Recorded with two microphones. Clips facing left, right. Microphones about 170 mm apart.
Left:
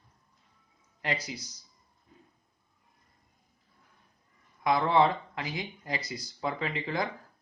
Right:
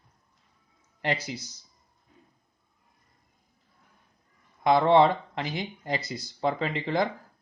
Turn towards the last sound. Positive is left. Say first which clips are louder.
# right 5 dB
turn(degrees=-25)  # may be behind; listen again after turning